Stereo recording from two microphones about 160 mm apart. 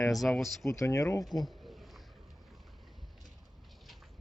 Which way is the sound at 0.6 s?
20° left (ahead or behind).